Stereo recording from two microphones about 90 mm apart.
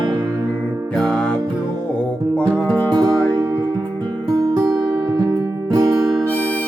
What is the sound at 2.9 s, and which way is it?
Music, 55° right (ahead or behind).